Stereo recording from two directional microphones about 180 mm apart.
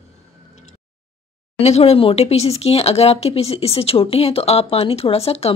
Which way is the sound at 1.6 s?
35° left (ahead or behind).